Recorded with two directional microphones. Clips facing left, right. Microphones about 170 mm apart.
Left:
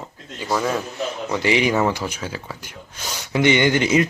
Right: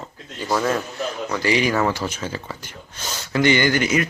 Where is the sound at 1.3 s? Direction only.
20° left (ahead or behind).